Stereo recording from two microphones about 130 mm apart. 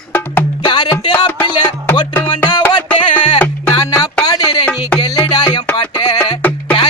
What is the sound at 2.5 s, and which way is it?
Music, 35° left (ahead or behind).